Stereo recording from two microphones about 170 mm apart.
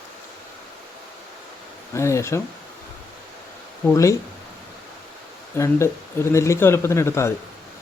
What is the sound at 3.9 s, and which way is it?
Speech, 20° left (ahead or behind).